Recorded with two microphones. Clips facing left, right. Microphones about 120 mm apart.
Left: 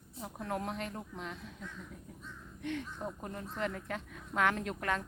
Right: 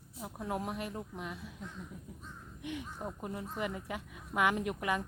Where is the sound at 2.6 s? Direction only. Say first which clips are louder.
Left 2 dB; 10° right (ahead or behind).